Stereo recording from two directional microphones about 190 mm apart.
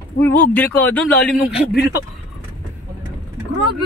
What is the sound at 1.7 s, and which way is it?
Speech, 60° left (ahead or behind).